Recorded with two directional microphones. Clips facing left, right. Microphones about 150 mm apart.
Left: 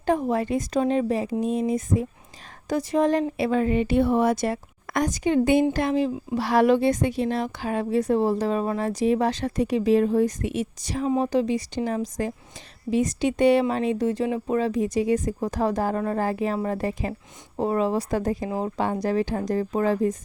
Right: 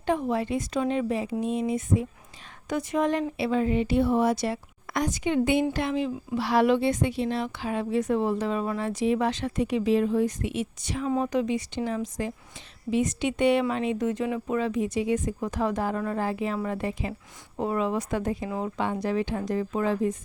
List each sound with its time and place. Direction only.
0.0 s a woman's voice: 40° left (ahead or behind)